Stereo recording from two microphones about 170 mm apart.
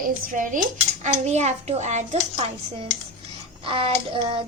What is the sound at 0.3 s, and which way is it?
A child's voice, 50° right (ahead or behind).